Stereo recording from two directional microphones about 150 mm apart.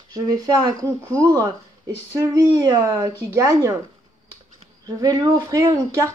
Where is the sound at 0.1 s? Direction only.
25° right (ahead or behind).